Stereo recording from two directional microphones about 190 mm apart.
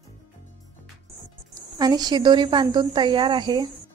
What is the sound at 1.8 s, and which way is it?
A woman's voice, 20° right (ahead or behind).